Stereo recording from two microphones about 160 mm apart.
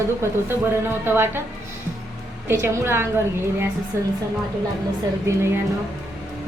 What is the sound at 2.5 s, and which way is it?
A woman's voice, 15° right (ahead or behind).